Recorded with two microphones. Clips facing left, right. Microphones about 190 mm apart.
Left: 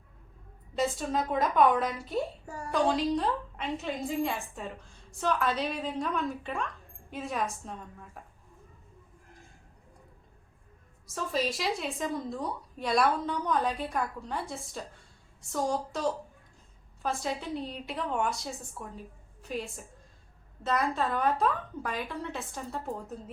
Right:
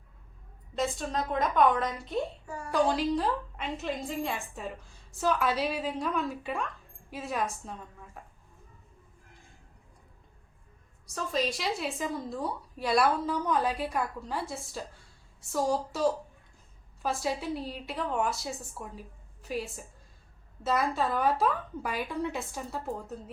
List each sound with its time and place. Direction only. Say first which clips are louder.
0.8 s a woman's voice: left 2 dB; 5° left (ahead or behind)
11.0 s a woman's voice: even; centre (ahead or behind)
17.0 s a woman's voice: right 1 dB; 5° right (ahead or behind)